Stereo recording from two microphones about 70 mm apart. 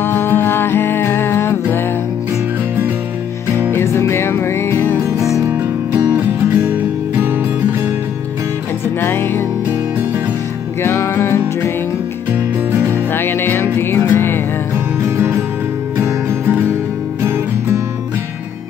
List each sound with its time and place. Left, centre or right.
0.0 s music: left
3.7 s music: left
6.1 s music: right
8.8 s music: left
10.8 s music: left
12.9 s music: left
15.0 s music: right